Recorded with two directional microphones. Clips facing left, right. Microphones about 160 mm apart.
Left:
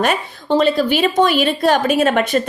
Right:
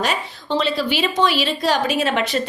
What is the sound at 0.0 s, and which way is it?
A woman's voice, 50° left (ahead or behind).